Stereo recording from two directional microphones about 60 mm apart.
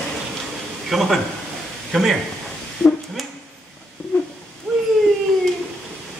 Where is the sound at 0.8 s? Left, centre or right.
Centre.